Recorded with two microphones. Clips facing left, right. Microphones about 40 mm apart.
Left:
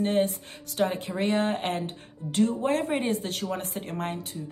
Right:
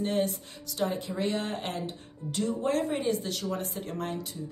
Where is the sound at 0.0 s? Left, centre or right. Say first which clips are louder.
Left 4 dB; left.